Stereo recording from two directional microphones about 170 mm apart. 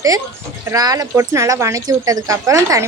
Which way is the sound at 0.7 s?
20° right (ahead or behind).